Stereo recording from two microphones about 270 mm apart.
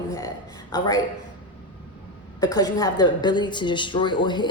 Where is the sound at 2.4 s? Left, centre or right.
Centre.